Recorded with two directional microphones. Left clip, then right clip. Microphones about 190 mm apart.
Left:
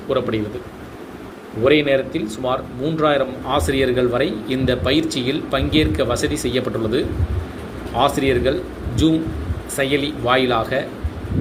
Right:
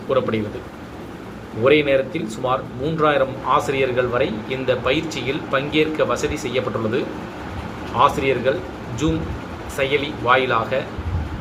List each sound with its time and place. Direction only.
1.6 s speech: 40° left (ahead or behind)